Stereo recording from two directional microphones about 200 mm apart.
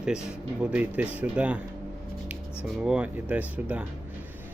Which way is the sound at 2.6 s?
5° right (ahead or behind).